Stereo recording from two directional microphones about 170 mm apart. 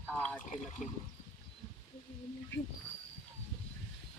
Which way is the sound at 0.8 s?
45° left (ahead or behind).